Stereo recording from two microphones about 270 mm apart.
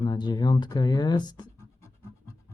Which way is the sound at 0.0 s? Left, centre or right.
Centre.